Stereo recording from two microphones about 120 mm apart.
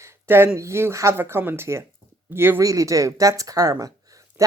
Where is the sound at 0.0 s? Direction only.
20° right (ahead or behind).